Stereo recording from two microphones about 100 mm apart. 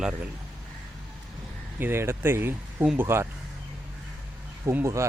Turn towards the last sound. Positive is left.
turn(degrees=-25)  # may be behind; listen again after turning